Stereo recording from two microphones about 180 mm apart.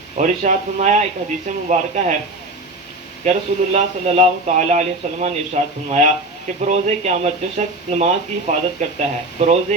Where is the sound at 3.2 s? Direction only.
35° right (ahead or behind).